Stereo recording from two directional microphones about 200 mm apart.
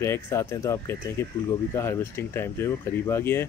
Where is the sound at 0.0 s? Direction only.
15° left (ahead or behind).